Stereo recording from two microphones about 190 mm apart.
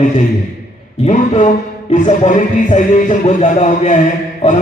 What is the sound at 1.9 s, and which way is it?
A man's voice, 40° left (ahead or behind).